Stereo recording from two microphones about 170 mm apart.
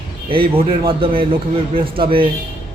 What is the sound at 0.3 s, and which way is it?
A man's voice, 30° right (ahead or behind).